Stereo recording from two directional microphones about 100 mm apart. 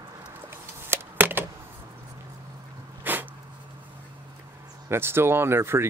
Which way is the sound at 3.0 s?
20° right (ahead or behind).